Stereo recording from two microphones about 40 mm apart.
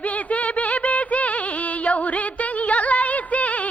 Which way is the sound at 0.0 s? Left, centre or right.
Left.